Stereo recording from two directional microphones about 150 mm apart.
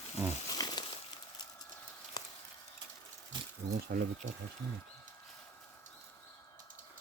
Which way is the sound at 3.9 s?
90° right.